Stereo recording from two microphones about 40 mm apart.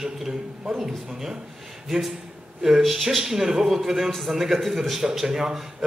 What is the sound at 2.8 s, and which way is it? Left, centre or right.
Speech, centre.